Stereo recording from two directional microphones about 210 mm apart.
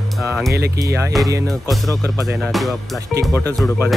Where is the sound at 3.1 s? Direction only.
15° right (ahead or behind).